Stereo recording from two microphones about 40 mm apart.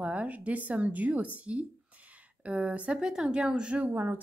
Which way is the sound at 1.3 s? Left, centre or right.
Right.